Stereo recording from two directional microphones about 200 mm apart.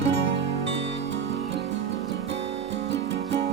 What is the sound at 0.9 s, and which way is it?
Music, 60° right (ahead or behind).